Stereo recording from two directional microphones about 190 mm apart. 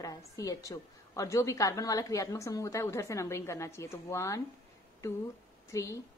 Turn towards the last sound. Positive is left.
turn(degrees=15)  # may be behind; listen again after turning